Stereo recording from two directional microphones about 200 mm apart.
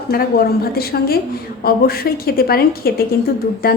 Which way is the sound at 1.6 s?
50° left (ahead or behind).